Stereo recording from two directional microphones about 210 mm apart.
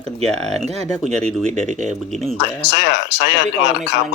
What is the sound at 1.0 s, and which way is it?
Speech, 5° left (ahead or behind).